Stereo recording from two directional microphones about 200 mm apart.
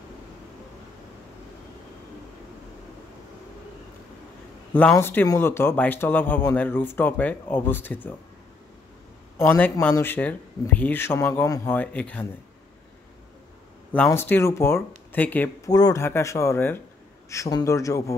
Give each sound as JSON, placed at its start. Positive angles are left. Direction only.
{"t": 4.7, "sound": "speech", "side_deg": 10}
{"t": 9.4, "sound": "speech", "side_deg": 10}
{"t": 13.9, "sound": "speech", "side_deg": 10}